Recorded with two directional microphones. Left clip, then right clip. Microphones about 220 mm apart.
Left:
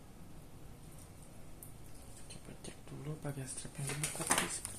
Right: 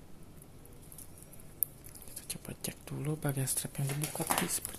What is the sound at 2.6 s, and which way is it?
Speech, 55° right (ahead or behind).